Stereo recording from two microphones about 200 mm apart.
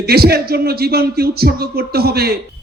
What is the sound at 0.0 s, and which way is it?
A man's voice, 50° right (ahead or behind).